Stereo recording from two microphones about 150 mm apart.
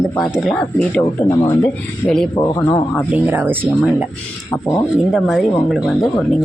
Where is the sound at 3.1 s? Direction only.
10° right (ahead or behind).